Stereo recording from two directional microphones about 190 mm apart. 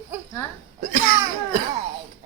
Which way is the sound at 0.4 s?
15° left (ahead or behind).